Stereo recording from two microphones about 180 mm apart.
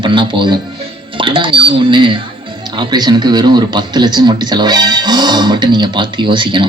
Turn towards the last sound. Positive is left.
turn(degrees=-25)  # may be behind; listen again after turning